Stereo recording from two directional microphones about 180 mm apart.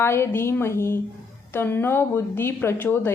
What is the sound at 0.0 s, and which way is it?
A woman's voice, 15° left (ahead or behind).